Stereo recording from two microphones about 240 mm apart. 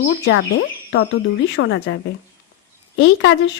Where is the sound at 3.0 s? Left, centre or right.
Left.